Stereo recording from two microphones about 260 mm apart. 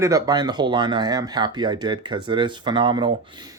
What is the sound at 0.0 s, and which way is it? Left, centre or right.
Speech, centre.